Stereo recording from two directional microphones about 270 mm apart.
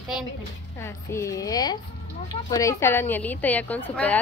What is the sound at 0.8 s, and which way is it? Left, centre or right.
A woman's voice, centre.